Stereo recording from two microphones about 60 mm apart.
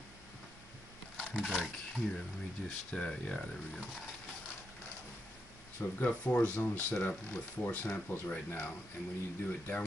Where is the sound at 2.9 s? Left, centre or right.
Centre.